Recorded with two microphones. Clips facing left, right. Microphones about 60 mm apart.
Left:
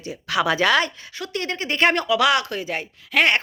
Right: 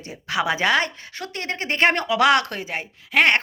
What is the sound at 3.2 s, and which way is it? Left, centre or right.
Speech, right.